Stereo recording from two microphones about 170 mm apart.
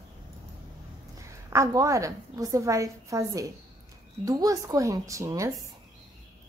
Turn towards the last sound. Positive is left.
turn(degrees=-20)  # may be behind; listen again after turning